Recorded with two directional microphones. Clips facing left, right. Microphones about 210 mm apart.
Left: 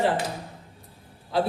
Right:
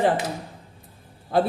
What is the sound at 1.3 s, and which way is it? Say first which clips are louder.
Speech: right 3 dB; 50° right (ahead or behind).